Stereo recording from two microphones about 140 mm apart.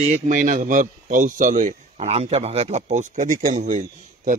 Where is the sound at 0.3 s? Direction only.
65° right (ahead or behind).